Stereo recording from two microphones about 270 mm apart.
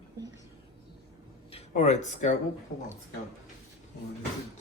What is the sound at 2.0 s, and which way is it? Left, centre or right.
Speech, left.